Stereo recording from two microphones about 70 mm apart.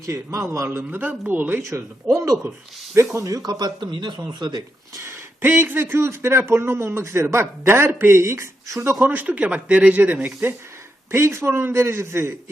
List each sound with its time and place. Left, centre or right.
0.0 s a man's voice: right
0.8 s speech: right
1.7 s a man's voice: right
2.9 s speech: right
3.2 s a man's voice: right
5.0 s speech: right
9.0 s speech: right
11.1 s speech: right